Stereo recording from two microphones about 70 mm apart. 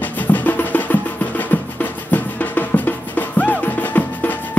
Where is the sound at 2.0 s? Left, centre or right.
Left.